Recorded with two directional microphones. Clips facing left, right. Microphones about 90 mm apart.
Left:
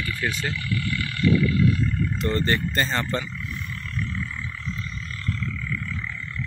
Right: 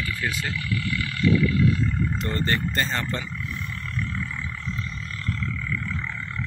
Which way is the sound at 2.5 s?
5° left (ahead or behind).